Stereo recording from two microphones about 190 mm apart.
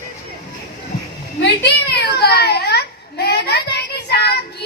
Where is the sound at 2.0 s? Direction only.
55° left (ahead or behind).